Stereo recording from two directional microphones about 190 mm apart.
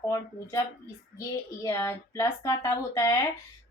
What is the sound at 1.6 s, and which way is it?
A woman's voice, 15° left (ahead or behind).